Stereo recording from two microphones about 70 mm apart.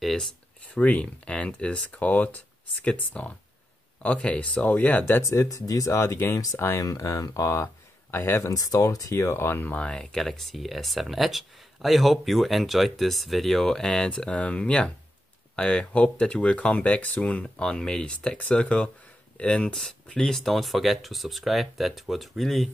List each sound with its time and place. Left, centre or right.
0.0 s a sound: centre
0.7 s speech: centre
5.2 s speech: left
6.8 s speech: left
8.1 s speech: left
8.5 s speech: left
9.1 s speech: left
9.8 s speech: centre